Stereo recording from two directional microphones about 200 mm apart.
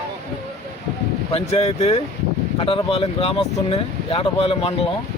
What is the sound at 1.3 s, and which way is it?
Speech, 30° left (ahead or behind).